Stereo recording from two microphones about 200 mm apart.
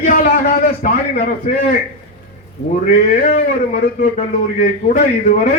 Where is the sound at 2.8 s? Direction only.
45° left (ahead or behind).